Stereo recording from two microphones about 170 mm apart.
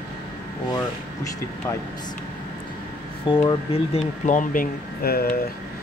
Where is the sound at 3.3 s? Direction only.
30° left (ahead or behind).